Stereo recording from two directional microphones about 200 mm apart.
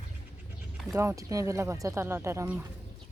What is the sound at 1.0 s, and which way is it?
Speech, 15° right (ahead or behind).